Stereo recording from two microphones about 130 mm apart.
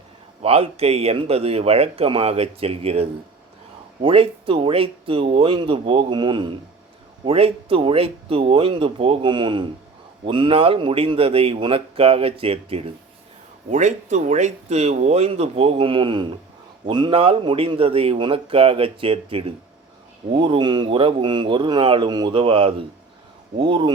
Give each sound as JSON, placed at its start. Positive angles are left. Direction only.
{"t": 0.4, "sound": "speech", "side_deg": -50}
{"t": 13.7, "sound": "speech", "side_deg": -70}